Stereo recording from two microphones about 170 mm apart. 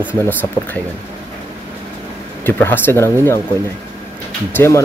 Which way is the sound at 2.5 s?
10° left (ahead or behind).